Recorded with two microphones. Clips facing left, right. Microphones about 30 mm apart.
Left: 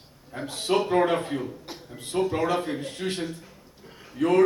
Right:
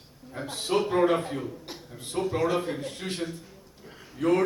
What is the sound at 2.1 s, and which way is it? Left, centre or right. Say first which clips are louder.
Speech: left 4 dB; left.